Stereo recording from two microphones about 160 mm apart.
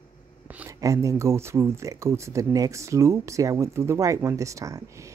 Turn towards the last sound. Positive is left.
turn(degrees=-20)  # may be behind; listen again after turning